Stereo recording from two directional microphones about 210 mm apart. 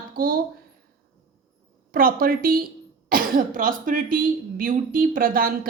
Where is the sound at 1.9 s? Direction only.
45° right (ahead or behind).